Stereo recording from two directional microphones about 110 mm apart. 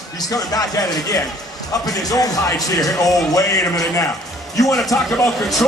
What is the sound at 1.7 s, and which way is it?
Speech, 35° left (ahead or behind).